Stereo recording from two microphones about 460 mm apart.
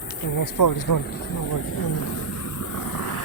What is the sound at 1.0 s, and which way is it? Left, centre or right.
Speech, centre.